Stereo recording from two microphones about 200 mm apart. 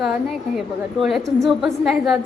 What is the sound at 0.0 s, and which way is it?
A woman's voice, centre (ahead or behind).